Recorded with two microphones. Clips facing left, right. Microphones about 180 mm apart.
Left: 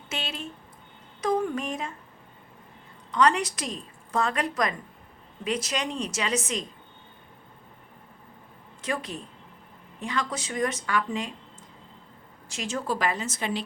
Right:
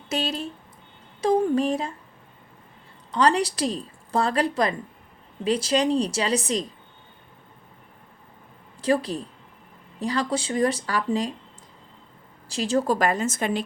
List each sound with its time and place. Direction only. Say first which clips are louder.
0.1 s speech: right 8 dB; 40° right (ahead or behind)
3.1 s speech: right 2 dB; 35° right (ahead or behind)
8.8 s speech: right 9 dB; 35° right (ahead or behind)
12.5 s a woman's voice: right 7 dB; 35° right (ahead or behind); by 13.7 s 50° right (ahead or behind)